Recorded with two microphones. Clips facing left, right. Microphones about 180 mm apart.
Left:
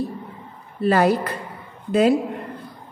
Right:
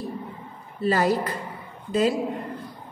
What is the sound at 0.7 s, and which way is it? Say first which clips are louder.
A woman's voice: left 4 dB; 60° left (ahead or behind).